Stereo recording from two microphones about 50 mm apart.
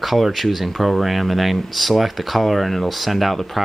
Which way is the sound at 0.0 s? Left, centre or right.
Centre.